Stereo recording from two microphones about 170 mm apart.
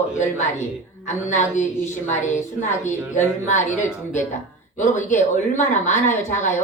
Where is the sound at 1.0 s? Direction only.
45° left (ahead or behind).